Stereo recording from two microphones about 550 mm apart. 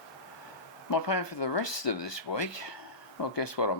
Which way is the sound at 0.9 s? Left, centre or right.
Left.